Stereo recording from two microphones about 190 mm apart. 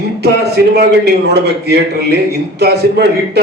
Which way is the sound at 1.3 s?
60° right (ahead or behind).